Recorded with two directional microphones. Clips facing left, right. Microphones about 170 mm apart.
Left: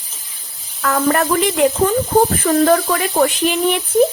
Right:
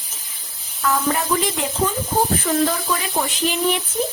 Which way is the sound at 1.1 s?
80° left.